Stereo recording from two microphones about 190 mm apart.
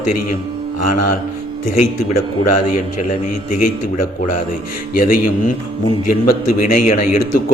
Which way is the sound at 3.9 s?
45° left (ahead or behind).